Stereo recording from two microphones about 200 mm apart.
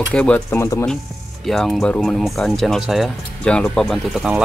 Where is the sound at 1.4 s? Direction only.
Centre (ahead or behind).